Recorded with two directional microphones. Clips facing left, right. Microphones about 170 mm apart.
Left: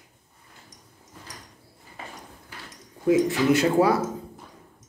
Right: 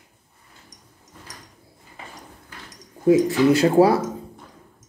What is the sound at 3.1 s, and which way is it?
Speech, 35° right (ahead or behind).